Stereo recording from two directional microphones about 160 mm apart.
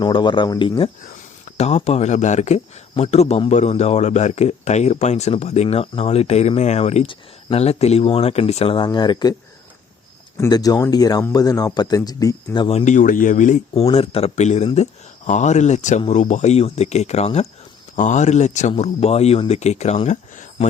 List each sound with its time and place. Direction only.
0.0 s speech: 30° left (ahead or behind)
1.5 s speech: 40° left (ahead or behind); by 9.3 s 25° left (ahead or behind)
10.3 s speech: 20° left (ahead or behind)
12.6 s speech: 45° left (ahead or behind)
13.8 s speech: 35° left (ahead or behind)